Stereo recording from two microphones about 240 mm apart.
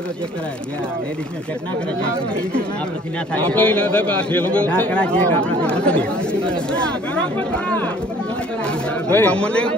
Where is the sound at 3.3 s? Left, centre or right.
Centre.